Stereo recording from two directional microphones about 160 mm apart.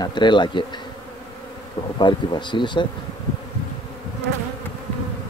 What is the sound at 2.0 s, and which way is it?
Bee, 30° left (ahead or behind).